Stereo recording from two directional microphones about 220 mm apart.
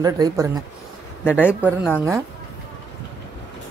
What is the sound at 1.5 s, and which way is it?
Speech, 5° right (ahead or behind).